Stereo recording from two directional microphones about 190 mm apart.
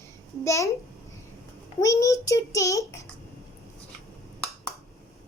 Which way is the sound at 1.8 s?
15° left (ahead or behind).